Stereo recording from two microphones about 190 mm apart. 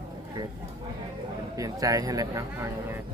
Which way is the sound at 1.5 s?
20° right (ahead or behind).